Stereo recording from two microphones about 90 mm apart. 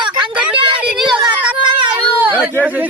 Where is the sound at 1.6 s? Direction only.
65° right (ahead or behind).